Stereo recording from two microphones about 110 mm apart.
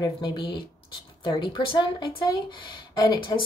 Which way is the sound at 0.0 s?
40° left (ahead or behind).